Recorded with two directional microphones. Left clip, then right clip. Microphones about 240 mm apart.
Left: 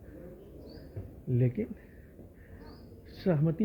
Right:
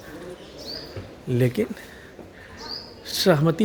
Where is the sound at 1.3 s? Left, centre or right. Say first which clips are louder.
Right 10 dB; right.